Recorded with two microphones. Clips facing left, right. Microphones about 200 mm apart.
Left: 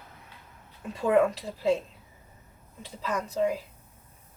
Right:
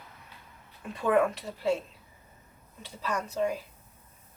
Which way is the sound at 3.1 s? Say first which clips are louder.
Left 2 dB; 20° left (ahead or behind).